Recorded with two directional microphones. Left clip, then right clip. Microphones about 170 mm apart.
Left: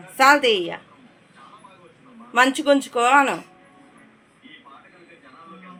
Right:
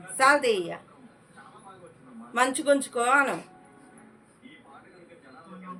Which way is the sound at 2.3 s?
30° left (ahead or behind).